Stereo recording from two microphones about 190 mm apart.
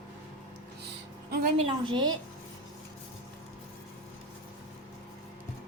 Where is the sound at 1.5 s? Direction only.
25° right (ahead or behind).